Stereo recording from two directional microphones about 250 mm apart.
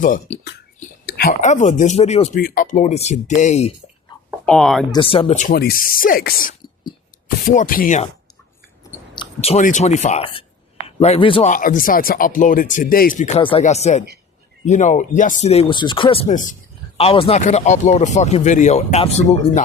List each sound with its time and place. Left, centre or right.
0.0 s speech: left
4.4 s speech: centre
4.9 s speech: left
9.1 s speech: left
11.5 s speech: left